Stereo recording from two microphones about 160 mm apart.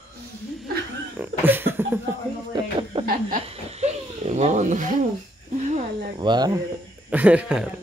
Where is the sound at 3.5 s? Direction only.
40° right (ahead or behind).